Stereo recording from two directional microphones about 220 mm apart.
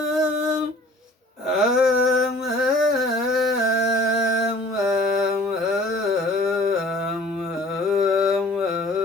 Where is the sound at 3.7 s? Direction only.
55° left (ahead or behind).